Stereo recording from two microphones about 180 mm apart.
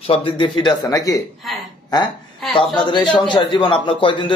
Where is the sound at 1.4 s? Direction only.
Centre (ahead or behind).